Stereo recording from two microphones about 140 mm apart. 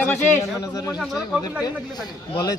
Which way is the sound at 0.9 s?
5° right (ahead or behind).